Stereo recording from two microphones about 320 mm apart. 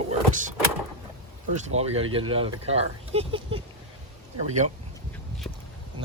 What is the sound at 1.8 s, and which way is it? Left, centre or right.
Speech, centre.